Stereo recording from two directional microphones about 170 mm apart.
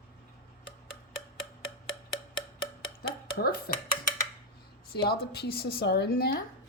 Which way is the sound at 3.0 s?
65° left (ahead or behind).